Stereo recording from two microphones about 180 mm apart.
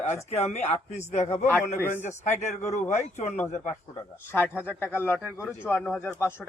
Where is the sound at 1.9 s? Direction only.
40° left (ahead or behind).